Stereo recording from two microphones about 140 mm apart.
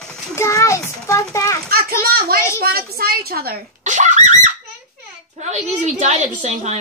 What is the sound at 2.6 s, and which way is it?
A child's voice, 90° right.